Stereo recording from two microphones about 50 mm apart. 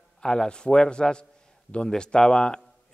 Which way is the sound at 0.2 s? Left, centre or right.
Centre.